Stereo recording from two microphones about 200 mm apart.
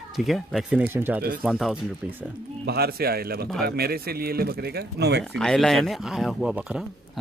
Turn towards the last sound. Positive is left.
turn(degrees=-5)  # may be behind; listen again after turning